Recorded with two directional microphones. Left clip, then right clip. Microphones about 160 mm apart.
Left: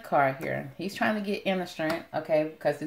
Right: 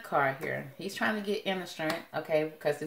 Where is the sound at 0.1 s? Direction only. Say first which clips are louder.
Left 4 dB; 35° left (ahead or behind).